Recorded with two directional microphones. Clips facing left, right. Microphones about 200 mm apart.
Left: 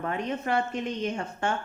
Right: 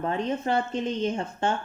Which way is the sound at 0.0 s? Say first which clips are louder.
Right 3 dB; 30° right (ahead or behind).